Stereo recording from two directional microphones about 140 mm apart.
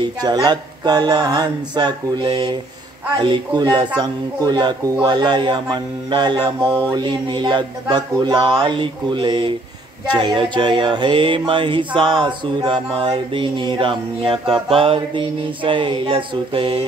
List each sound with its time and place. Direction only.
0.2 s speech: 30° right (ahead or behind)
3.2 s music: 35° right (ahead or behind)